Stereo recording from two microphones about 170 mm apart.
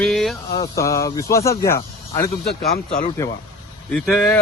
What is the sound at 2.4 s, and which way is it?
Speech, 65° left (ahead or behind).